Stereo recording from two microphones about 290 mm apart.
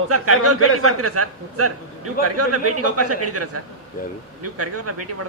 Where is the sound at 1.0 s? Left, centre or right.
Right.